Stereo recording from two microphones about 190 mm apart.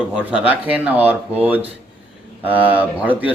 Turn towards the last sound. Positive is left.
turn(degrees=-10)  # may be behind; listen again after turning